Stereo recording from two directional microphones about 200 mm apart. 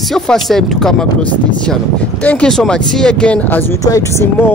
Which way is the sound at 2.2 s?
5° left (ahead or behind).